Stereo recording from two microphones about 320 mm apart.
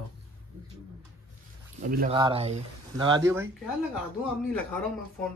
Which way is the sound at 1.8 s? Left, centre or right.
Right.